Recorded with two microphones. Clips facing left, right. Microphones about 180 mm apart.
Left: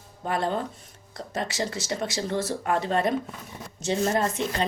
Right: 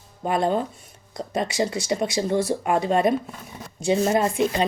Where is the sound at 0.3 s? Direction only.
15° right (ahead or behind).